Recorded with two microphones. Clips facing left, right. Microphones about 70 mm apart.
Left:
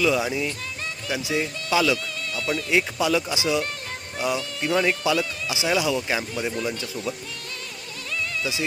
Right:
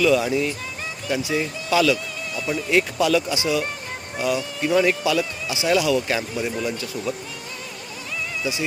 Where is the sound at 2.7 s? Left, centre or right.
Centre.